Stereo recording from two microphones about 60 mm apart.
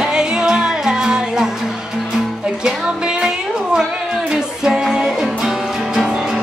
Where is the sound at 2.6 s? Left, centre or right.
Centre.